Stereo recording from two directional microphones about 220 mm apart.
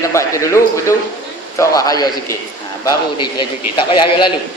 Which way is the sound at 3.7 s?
20° left (ahead or behind).